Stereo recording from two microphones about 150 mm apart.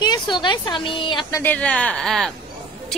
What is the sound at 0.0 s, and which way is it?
A woman's voice, 30° left (ahead or behind).